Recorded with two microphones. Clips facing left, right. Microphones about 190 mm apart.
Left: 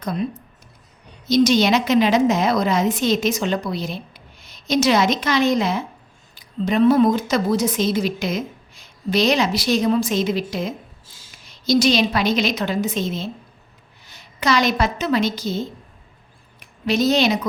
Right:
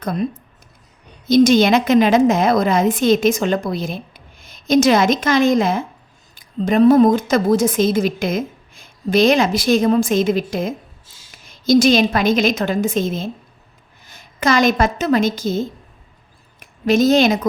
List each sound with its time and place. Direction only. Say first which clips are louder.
0.0 s speech: right 3 dB; 50° right (ahead or behind)
1.3 s a woman's voice: right 4 dB; 50° right (ahead or behind)